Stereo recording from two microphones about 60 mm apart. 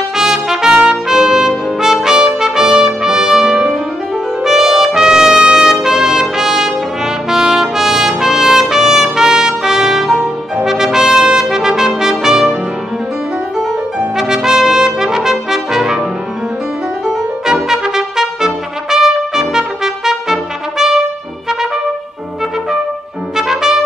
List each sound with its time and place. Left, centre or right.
0.1 s trumpet: centre
13.9 s trumpet: centre
17.6 s trumpet: centre
23.3 s trumpet: centre